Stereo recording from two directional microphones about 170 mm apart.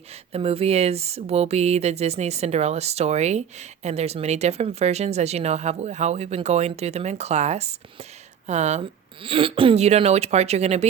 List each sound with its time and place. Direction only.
0.3 s speech: 35° right (ahead or behind)